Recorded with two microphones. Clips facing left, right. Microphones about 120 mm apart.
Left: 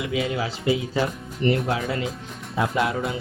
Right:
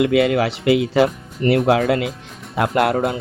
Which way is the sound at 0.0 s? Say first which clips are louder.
Right 10 dB; 70° right (ahead or behind).